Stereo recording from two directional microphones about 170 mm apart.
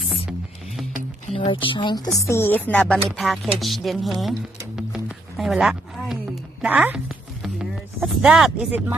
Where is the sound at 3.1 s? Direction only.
Centre (ahead or behind).